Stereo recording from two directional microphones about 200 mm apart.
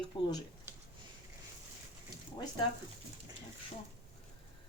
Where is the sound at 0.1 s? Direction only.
25° left (ahead or behind).